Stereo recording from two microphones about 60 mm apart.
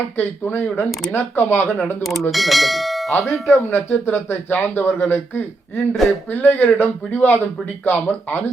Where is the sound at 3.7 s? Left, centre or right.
Left.